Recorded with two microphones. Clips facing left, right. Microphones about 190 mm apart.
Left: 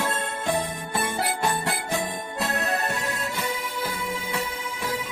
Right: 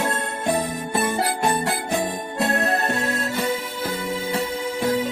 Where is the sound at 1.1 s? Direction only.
20° right (ahead or behind).